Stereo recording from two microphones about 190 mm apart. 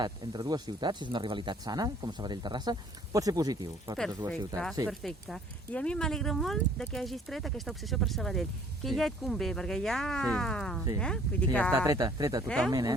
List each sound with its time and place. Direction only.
0.0 s speech: 20° right (ahead or behind)
4.9 s speech: centre (ahead or behind)
11.7 s speech: 15° right (ahead or behind)
12.5 s speech: 5° left (ahead or behind)
12.7 s speech: 20° right (ahead or behind)